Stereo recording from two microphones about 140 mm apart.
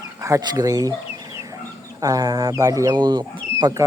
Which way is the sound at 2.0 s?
25° right (ahead or behind).